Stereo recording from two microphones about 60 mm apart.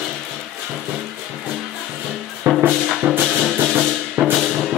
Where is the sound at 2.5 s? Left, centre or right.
Right.